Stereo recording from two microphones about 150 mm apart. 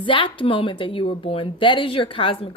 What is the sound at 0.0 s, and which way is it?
Speech, 35° left (ahead or behind).